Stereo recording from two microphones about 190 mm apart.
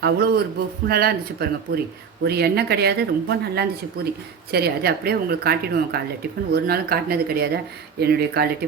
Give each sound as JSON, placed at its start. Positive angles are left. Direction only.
{"t": 0.0, "sound": "speech", "side_deg": -55}